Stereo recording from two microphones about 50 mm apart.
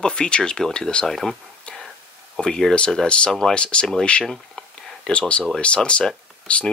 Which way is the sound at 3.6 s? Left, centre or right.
Centre.